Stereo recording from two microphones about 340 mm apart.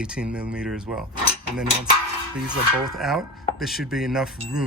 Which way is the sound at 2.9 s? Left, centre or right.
Centre.